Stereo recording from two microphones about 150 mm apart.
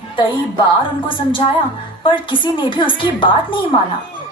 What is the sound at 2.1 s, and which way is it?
A woman's voice, 35° left (ahead or behind).